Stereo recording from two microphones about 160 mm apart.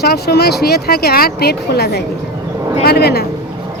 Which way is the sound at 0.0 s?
85° left.